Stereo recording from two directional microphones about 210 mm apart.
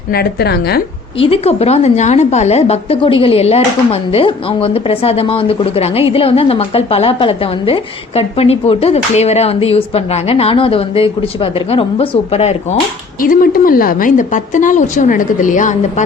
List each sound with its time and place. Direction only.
0.1 s a woman's voice: 50° left (ahead or behind)
1.2 s a woman's voice: 30° left (ahead or behind)
13.2 s a woman's voice: 40° left (ahead or behind)